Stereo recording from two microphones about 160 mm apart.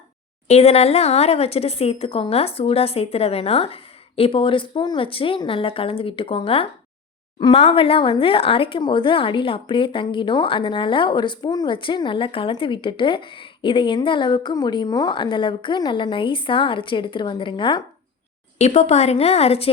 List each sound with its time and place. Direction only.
0.4 s speech: 40° left (ahead or behind)
18.6 s speech: 40° left (ahead or behind)